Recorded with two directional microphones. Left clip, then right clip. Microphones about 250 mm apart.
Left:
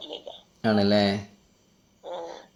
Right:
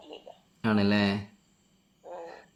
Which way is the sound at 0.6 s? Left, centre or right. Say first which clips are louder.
Left 5 dB; centre.